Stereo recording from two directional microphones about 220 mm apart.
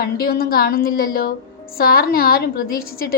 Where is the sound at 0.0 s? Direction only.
45° left (ahead or behind).